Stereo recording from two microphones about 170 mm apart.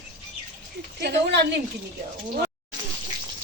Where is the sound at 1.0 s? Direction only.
75° right (ahead or behind).